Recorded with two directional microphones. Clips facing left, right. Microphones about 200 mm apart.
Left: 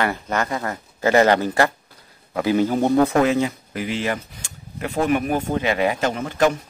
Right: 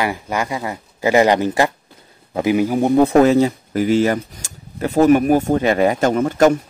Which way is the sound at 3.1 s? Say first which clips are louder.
Right 6 dB; 35° right (ahead or behind).